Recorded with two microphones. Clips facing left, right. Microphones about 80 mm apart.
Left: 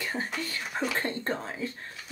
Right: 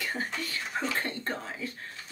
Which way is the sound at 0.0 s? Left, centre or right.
Left.